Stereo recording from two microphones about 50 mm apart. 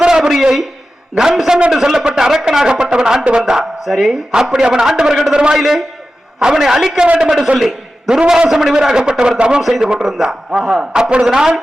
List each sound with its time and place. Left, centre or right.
0.0 s a sound: centre
1.1 s a man's voice: centre
4.3 s a man's voice: centre
6.9 s a man's voice: centre
8.2 s a man's voice: centre
8.4 s a man's voice: centre
9.6 s a man's voice: centre